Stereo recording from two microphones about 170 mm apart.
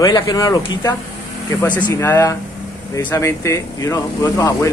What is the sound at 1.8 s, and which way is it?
Speech, 15° left (ahead or behind).